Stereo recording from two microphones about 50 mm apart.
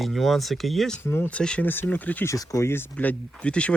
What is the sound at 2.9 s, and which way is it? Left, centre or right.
Speech, left.